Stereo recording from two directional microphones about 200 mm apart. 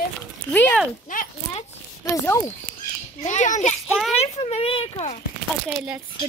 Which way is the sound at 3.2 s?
35° left (ahead or behind).